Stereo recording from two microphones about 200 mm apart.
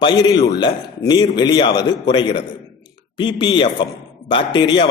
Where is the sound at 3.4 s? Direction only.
25° left (ahead or behind).